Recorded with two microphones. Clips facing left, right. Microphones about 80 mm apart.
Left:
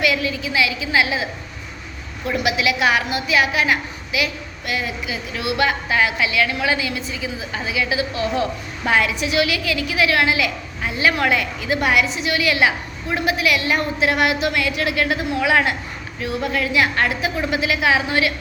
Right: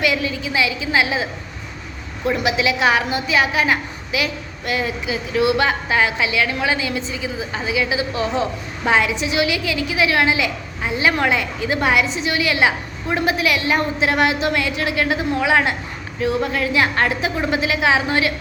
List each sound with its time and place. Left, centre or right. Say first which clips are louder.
0.0 s a woman's voice: even; right